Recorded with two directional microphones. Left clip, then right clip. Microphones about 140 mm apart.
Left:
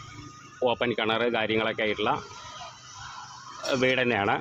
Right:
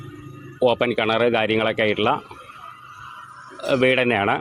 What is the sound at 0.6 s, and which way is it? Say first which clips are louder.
Speech: right 6 dB; 35° right (ahead or behind).